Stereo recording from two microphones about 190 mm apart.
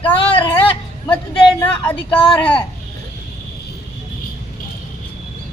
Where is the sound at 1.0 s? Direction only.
10° left (ahead or behind).